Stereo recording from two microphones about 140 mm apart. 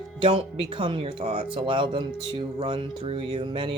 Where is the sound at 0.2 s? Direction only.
45° right (ahead or behind).